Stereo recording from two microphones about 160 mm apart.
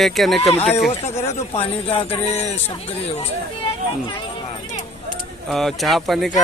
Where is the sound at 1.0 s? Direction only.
40° left (ahead or behind).